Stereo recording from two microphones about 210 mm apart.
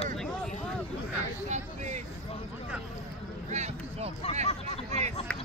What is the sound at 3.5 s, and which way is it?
Vehicle, 30° right (ahead or behind).